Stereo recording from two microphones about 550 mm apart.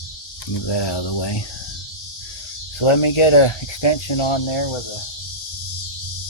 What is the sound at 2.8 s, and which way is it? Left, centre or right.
Speech, left.